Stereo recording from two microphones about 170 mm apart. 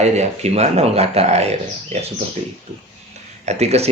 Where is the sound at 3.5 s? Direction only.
40° right (ahead or behind).